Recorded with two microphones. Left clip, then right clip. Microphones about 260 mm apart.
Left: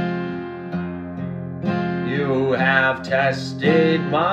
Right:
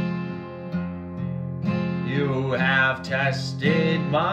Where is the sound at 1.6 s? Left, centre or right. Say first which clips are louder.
Left 5 dB; centre.